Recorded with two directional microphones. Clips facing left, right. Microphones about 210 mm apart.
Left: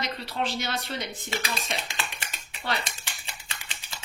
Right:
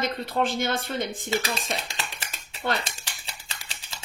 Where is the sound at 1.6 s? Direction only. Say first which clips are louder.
Right 1 dB; 35° right (ahead or behind).